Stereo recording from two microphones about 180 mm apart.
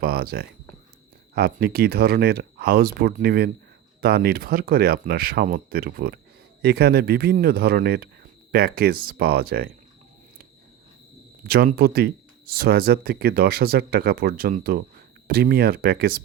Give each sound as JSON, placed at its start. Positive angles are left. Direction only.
{"t": 0.0, "sound": "speech", "side_deg": -60}
{"t": 11.4, "sound": "speech", "side_deg": -60}